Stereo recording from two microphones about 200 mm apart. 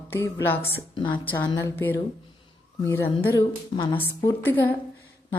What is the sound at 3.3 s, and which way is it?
Speech, 20° left (ahead or behind).